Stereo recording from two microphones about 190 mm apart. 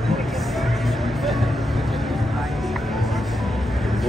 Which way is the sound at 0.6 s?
Centre (ahead or behind).